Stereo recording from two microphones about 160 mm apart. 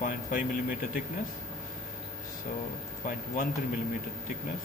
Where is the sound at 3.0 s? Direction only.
60° left (ahead or behind).